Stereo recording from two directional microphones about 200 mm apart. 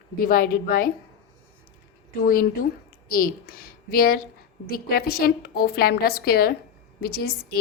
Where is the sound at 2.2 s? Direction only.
45° left (ahead or behind).